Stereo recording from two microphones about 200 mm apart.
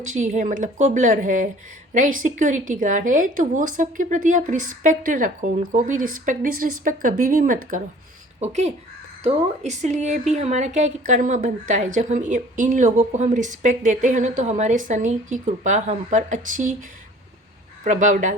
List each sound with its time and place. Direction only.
0.1 s a woman's voice: 40° right (ahead or behind)
17.8 s a woman's voice: 40° right (ahead or behind)